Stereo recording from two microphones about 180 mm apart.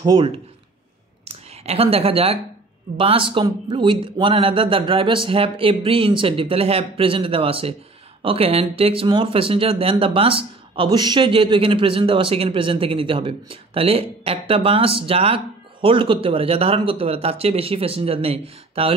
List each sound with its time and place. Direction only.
0.0 s speech: 25° right (ahead or behind)
1.2 s a sound: 35° right (ahead or behind)
3.0 s speech: 30° right (ahead or behind)